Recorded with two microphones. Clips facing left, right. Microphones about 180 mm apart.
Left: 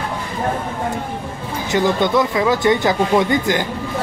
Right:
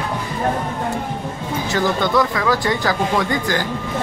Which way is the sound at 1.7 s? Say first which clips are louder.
Left 2 dB; 20° left (ahead or behind).